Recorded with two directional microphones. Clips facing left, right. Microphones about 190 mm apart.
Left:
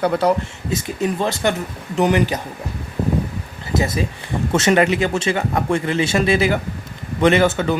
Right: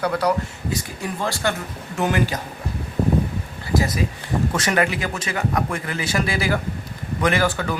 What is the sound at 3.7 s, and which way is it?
Speech, 25° left (ahead or behind).